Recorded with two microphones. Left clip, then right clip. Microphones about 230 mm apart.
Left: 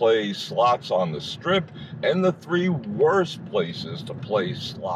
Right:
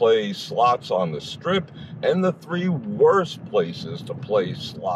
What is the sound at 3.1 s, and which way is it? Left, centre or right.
Speech, right.